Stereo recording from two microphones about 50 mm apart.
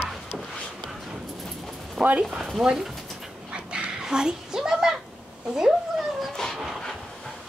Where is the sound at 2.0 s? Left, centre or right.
Right.